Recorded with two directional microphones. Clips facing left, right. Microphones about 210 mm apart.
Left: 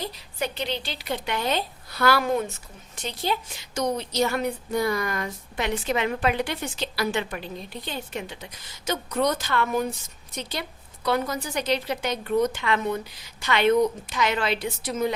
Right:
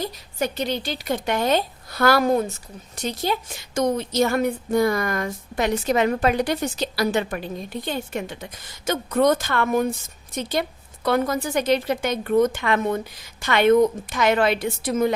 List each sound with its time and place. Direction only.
0.0 s a woman's voice: 45° right (ahead or behind)